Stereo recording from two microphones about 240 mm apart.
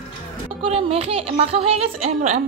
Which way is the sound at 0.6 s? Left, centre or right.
Right.